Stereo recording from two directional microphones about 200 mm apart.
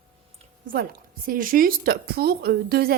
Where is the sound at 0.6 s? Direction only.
45° right (ahead or behind).